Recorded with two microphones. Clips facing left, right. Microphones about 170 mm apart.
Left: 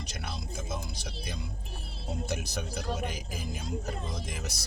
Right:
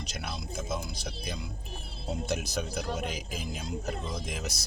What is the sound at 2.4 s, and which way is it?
Speech, 90° right.